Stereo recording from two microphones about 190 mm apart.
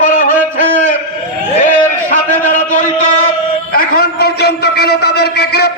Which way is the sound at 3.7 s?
55° left (ahead or behind).